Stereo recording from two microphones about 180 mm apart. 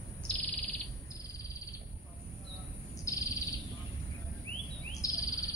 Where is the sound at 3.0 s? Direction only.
20° left (ahead or behind).